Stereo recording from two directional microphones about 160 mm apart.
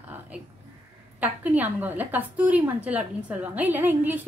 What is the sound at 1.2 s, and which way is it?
A woman's voice, 10° right (ahead or behind).